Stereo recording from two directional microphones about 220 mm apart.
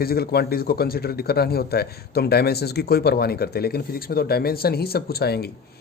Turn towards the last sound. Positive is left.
turn(degrees=45)  # may be behind; listen again after turning